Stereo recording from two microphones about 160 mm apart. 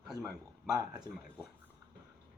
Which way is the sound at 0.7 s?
20° right (ahead or behind).